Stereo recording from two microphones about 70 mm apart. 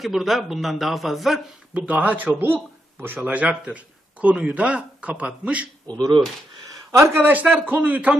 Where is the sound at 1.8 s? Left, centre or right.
Right.